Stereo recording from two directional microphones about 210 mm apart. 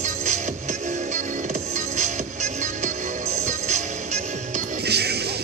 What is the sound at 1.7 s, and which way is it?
Music, 35° right (ahead or behind).